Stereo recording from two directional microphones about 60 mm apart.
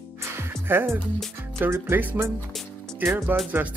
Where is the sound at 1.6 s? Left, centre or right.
Right.